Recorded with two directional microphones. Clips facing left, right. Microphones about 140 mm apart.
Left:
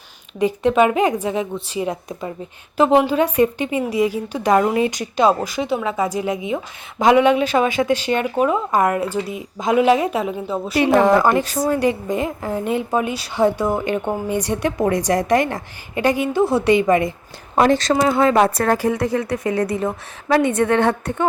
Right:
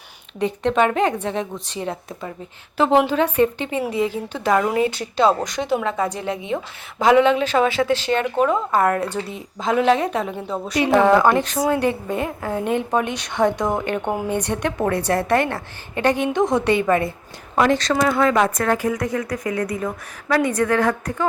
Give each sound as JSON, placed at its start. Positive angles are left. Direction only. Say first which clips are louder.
{"t": 0.3, "sound": "speech", "louder": "left 3 dB", "side_deg": 10}
{"t": 17.5, "sound": "a woman's voice", "louder": "left 2 dB", "side_deg": 35}